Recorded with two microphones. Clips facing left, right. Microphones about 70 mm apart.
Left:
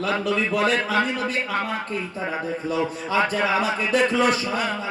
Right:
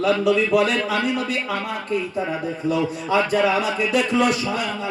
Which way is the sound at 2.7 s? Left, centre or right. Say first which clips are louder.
Right 2 dB; left.